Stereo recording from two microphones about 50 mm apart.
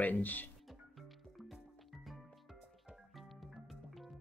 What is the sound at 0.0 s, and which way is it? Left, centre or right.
Speech, left.